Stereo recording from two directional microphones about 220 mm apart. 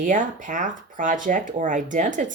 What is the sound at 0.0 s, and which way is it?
Speech, 35° right (ahead or behind).